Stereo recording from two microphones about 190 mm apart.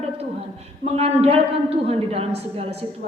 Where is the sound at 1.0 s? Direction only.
30° right (ahead or behind).